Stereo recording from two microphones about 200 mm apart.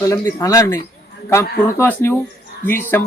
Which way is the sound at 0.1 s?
15° left (ahead or behind).